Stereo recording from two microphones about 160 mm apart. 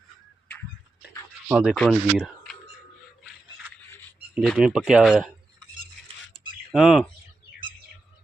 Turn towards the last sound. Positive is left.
turn(degrees=0)  # may be behind; listen again after turning